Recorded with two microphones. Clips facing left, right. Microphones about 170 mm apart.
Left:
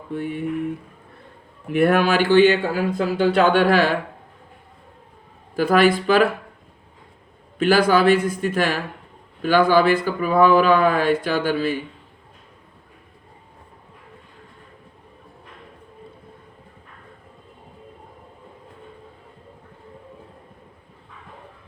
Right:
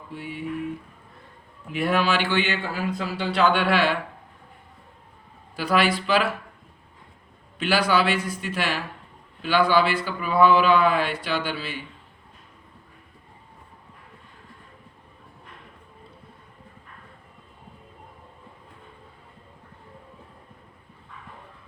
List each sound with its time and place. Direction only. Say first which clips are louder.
0.1 s a sound: left 8 dB; 55° left (ahead or behind)
1.7 s speech: left 6 dB; 60° left (ahead or behind)
5.5 s speech: left 6 dB; 45° left (ahead or behind)
7.6 s speech: left 6 dB; 45° left (ahead or behind)